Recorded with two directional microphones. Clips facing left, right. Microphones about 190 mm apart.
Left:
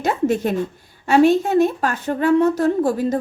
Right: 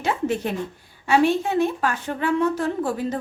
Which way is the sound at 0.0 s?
45° left (ahead or behind).